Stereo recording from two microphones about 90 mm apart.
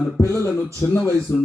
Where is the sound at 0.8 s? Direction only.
25° left (ahead or behind).